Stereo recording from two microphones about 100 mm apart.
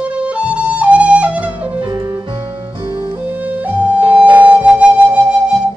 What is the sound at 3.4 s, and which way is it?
Music, 15° right (ahead or behind).